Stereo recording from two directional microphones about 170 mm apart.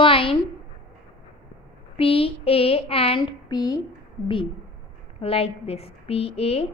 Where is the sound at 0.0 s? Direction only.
30° left (ahead or behind).